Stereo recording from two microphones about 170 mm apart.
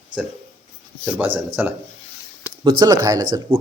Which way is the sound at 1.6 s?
10° right (ahead or behind).